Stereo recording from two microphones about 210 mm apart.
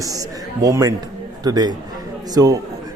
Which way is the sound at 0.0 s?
15° right (ahead or behind).